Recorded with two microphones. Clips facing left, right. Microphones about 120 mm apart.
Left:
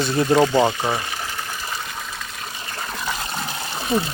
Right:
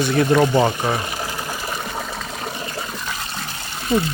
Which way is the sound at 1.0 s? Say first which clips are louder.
Right 3 dB; 35° right (ahead or behind).